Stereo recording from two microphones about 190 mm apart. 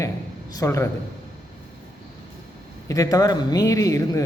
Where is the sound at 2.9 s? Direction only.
20° left (ahead or behind).